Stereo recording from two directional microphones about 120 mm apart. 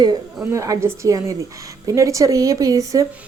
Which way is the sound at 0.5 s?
25° right (ahead or behind).